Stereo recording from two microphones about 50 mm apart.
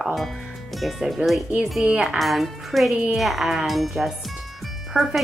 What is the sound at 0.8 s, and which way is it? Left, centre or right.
Speech, centre.